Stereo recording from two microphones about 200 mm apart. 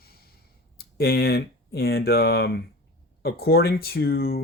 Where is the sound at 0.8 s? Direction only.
50° left (ahead or behind).